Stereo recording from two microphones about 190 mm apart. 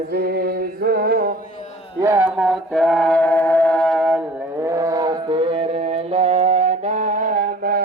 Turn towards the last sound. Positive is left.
turn(degrees=-45)  # may be behind; listen again after turning